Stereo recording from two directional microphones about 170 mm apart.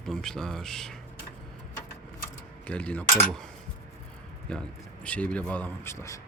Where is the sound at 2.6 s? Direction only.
5° left (ahead or behind).